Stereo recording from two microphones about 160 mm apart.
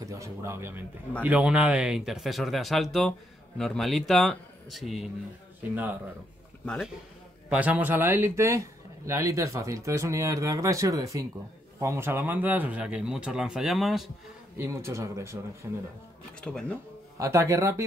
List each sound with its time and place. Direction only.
0.0 s speech: 20° right (ahead or behind); by 5.1 s centre (ahead or behind)
6.6 s speech: 5° left (ahead or behind)
7.4 s speech: 10° right (ahead or behind)
14.6 s speech: 15° right (ahead or behind)
16.3 s speech: 5° left (ahead or behind)
17.2 s speech: 20° right (ahead or behind)